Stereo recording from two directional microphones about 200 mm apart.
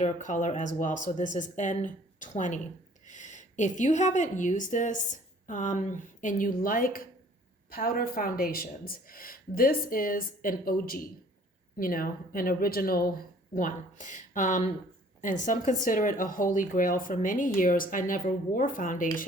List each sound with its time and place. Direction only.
0.0 s speech: 40° left (ahead or behind)